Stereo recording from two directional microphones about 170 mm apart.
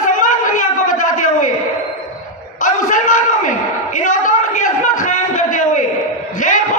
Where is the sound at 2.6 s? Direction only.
50° left (ahead or behind).